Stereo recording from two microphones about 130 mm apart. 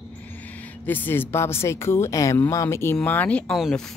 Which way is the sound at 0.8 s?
15° left (ahead or behind).